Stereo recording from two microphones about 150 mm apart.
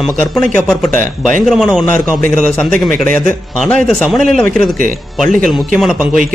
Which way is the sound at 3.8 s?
Centre (ahead or behind).